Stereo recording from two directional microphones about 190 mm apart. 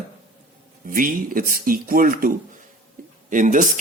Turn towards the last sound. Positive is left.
turn(degrees=-40)  # may be behind; listen again after turning